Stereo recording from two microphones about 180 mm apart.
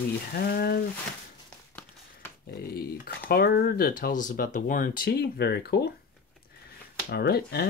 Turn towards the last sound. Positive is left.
turn(degrees=60)  # may be behind; listen again after turning